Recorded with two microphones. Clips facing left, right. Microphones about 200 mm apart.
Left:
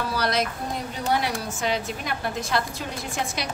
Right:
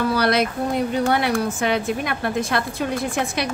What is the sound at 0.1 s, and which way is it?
A woman's voice, 65° right (ahead or behind).